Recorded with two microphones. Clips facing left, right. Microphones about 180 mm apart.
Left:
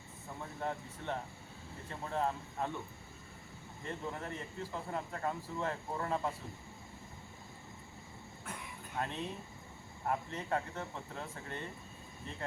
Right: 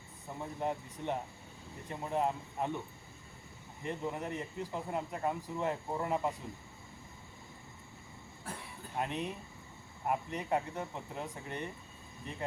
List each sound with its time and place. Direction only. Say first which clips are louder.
0.3 s a man's voice: right 3 dB; 15° right (ahead or behind)
3.8 s a man's voice: right 4 dB; 15° right (ahead or behind)
8.5 s a sound: right 2 dB; 35° right (ahead or behind)
9.0 s a man's voice: right 3 dB; 15° right (ahead or behind)